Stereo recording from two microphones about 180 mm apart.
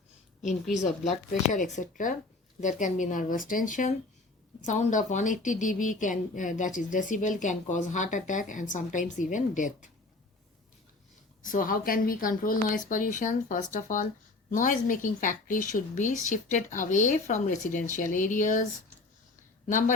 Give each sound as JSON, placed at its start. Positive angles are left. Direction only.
{"t": 1.5, "sound": "speech", "side_deg": 45}
{"t": 11.4, "sound": "speech", "side_deg": 50}